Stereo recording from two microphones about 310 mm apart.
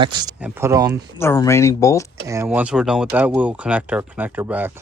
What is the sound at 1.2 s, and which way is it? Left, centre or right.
Speech, centre.